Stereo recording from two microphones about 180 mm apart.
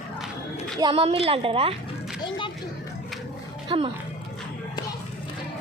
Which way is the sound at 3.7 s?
30° right (ahead or behind).